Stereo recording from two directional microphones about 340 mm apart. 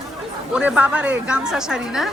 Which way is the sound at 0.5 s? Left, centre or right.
Centre.